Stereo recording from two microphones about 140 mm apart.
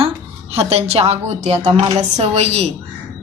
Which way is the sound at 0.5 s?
45° right (ahead or behind).